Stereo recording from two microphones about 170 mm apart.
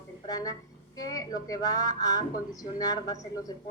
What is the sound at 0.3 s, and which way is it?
A woman's voice, 20° left (ahead or behind).